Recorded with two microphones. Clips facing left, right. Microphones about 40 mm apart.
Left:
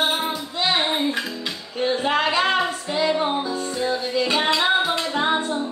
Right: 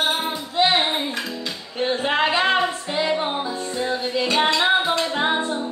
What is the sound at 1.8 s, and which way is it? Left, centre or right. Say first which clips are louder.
Music: even; centre.